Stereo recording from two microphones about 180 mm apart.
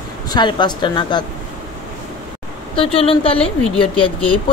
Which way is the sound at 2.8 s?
30° left (ahead or behind).